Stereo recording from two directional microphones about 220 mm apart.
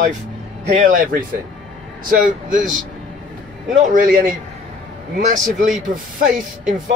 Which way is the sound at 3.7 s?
35° right (ahead or behind).